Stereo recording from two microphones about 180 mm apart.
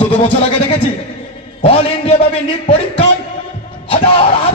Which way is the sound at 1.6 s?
35° left (ahead or behind).